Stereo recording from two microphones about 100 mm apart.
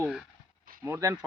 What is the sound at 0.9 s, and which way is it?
Speech, 30° right (ahead or behind).